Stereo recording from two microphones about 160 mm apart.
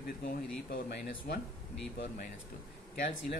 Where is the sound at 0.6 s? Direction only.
80° left.